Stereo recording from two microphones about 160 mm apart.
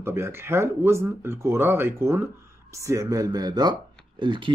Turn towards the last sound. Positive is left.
turn(degrees=-30)  # may be behind; listen again after turning